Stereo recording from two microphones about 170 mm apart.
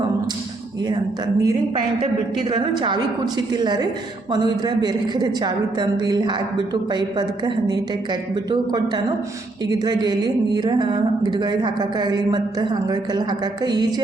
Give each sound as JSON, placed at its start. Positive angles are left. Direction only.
{"t": 1.4, "sound": "speech", "side_deg": -20}